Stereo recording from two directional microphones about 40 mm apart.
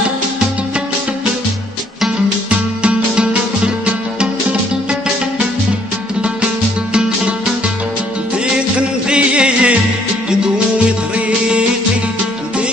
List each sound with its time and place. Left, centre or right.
2.5 s music: right
6.9 s music: right
8.7 s music: right